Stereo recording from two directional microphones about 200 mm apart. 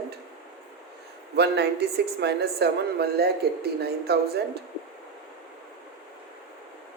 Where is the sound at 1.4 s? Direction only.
55° right (ahead or behind).